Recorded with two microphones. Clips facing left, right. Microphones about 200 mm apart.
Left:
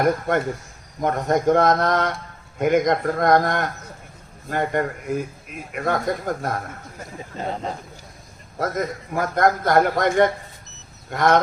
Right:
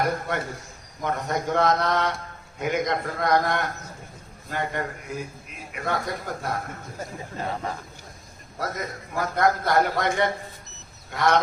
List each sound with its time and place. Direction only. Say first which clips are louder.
0.0 s a man's voice: left 6 dB; 50° left (ahead or behind)
7.3 s speech: left 3 dB; 20° left (ahead or behind)
8.5 s a man's voice: left 6 dB; 50° left (ahead or behind)